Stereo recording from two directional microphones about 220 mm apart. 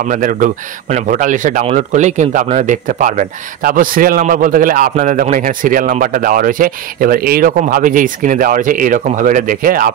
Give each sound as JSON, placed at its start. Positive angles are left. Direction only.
{"t": 0.1, "sound": "speech", "side_deg": -40}